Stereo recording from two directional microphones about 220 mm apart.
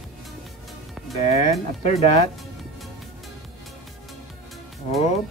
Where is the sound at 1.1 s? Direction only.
30° left (ahead or behind).